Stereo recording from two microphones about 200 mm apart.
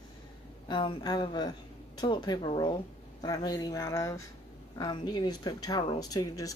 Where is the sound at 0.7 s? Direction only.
20° left (ahead or behind).